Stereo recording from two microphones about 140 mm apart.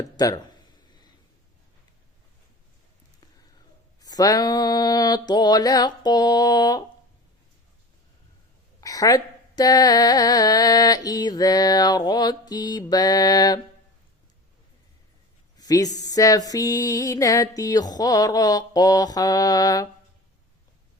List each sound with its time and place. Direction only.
0.0 s speech: 25° left (ahead or behind)
4.0 s speech: 25° left (ahead or behind)
8.8 s speech: 25° left (ahead or behind)
15.5 s speech: 25° left (ahead or behind)